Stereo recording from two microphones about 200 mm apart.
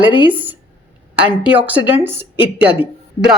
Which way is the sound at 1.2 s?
10° right (ahead or behind).